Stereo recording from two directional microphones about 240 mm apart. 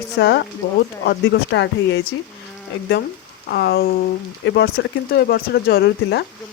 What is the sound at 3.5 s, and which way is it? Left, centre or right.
Speech, left.